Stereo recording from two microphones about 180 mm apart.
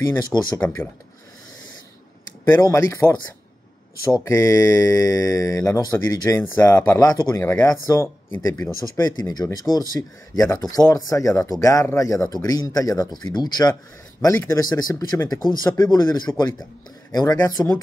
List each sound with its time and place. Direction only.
0.0 s speech: 15° left (ahead or behind)
2.5 s speech: 15° left (ahead or behind)
4.2 s speech: 15° left (ahead or behind)
17.6 s speech: 15° left (ahead or behind)